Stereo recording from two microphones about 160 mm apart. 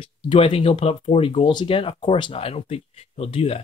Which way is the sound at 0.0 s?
35° left (ahead or behind).